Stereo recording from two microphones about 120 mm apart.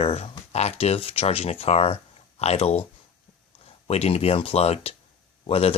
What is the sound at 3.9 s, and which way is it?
A man's voice, 60° left (ahead or behind).